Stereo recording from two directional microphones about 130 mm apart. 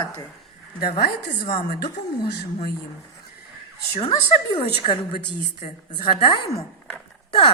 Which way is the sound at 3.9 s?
40° left (ahead or behind).